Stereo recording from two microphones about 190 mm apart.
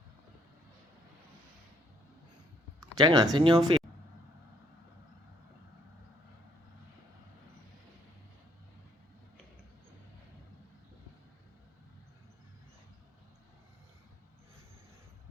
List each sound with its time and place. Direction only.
2.8 s speech: 20° right (ahead or behind)